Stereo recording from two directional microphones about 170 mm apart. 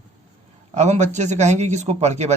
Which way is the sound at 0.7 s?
40° right (ahead or behind).